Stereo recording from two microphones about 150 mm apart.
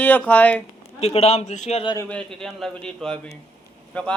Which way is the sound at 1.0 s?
45° left (ahead or behind).